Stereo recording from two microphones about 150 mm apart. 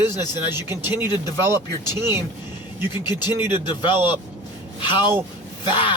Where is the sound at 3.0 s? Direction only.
25° left (ahead or behind).